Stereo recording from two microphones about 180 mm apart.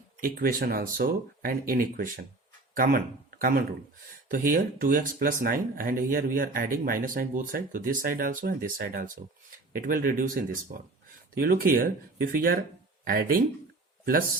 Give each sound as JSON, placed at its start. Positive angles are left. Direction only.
{"t": 0.2, "sound": "speech", "side_deg": -50}